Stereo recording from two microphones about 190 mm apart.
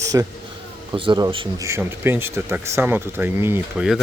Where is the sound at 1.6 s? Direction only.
15° right (ahead or behind).